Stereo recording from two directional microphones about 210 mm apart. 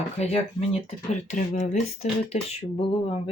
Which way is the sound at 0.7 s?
30° left (ahead or behind).